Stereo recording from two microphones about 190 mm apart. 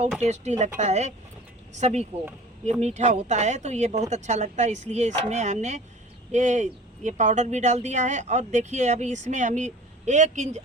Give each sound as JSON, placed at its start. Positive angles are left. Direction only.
{"t": 0.2, "sound": "speech", "side_deg": -35}